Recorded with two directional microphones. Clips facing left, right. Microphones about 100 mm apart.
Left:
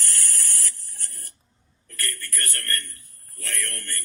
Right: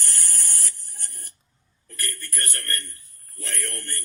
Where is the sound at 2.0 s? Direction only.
20° right (ahead or behind).